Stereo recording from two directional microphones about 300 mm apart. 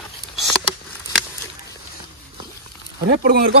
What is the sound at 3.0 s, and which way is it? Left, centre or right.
Speech, right.